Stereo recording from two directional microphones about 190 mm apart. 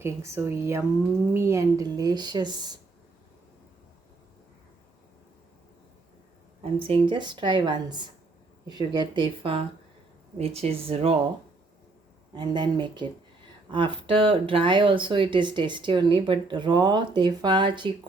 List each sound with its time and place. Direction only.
0.0 s speech: 15° right (ahead or behind)
6.6 s speech: 30° right (ahead or behind)
12.4 s speech: 25° right (ahead or behind)